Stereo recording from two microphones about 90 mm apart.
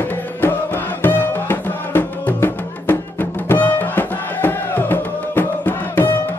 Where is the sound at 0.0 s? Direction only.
20° left (ahead or behind).